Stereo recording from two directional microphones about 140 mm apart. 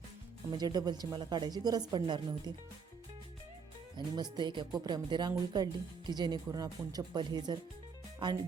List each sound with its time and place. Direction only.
0.5 s speech: 30° right (ahead or behind)
3.9 s speech: 30° right (ahead or behind)